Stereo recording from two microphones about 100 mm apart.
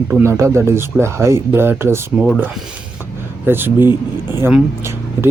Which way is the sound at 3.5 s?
20° right (ahead or behind).